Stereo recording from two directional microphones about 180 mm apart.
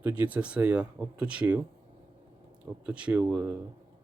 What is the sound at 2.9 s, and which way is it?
Speech, 5° right (ahead or behind).